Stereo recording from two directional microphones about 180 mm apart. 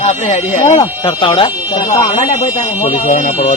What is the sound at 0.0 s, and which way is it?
Speech, 40° left (ahead or behind).